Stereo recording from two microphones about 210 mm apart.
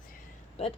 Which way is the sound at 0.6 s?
30° left (ahead or behind).